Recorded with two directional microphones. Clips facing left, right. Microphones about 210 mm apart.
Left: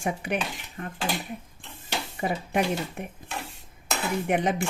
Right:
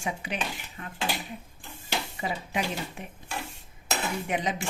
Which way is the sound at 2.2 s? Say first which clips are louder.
Left 8 dB; 55° left (ahead or behind).